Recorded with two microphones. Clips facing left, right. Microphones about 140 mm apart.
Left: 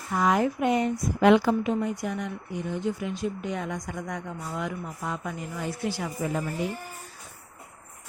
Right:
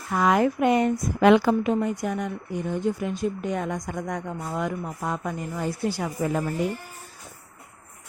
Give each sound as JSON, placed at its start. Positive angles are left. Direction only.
{"t": 0.1, "sound": "a woman's voice", "side_deg": -70}